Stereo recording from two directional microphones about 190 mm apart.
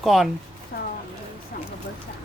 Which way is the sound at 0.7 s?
55° left (ahead or behind).